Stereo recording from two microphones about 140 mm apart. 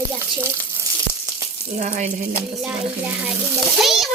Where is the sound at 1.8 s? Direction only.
60° right (ahead or behind).